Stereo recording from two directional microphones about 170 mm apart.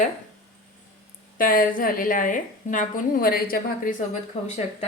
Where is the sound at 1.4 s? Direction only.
55° left (ahead or behind).